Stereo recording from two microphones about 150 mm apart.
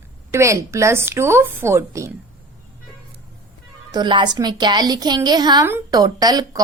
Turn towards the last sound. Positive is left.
turn(degrees=-25)  # may be behind; listen again after turning